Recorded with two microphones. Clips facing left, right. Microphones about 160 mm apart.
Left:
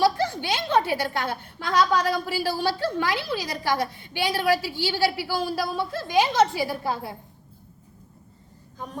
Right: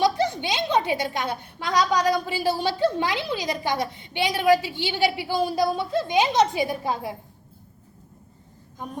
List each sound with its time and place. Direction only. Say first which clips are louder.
0.0 s a woman's voice: even; 20° right (ahead or behind)